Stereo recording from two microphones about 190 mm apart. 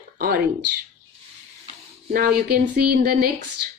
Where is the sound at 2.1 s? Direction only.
50° right (ahead or behind).